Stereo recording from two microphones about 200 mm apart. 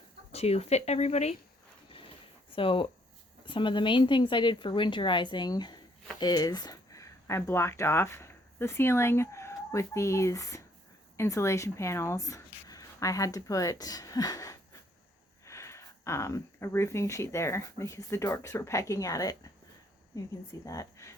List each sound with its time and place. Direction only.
0.3 s speech: 30° left (ahead or behind)
2.5 s speech: 25° left (ahead or behind)